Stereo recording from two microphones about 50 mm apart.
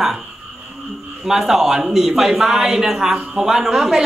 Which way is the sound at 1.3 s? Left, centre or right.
Centre.